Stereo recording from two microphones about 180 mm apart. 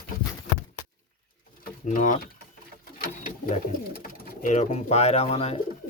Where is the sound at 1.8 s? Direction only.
45° left (ahead or behind).